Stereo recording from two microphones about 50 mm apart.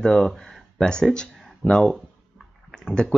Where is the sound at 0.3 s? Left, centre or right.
Centre.